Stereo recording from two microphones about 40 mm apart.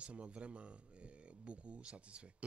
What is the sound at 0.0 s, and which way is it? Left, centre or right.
Speech, right.